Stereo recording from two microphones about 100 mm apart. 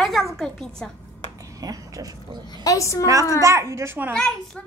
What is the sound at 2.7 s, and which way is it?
Speech, 35° left (ahead or behind).